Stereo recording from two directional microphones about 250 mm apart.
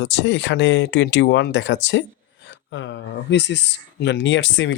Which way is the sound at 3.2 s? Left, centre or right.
Left.